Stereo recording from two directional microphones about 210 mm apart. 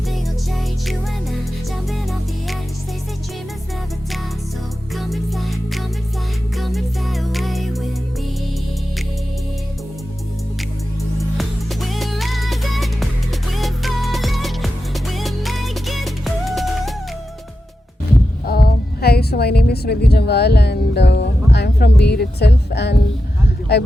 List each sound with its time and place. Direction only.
1.9 s music: centre (ahead or behind)
4.9 s music: centre (ahead or behind)
11.2 s music: centre (ahead or behind)
18.4 s a sound: 45° left (ahead or behind)
23.7 s speech: 50° left (ahead or behind)